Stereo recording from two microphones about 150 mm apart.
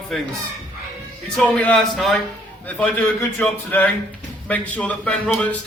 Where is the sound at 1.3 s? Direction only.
5° left (ahead or behind).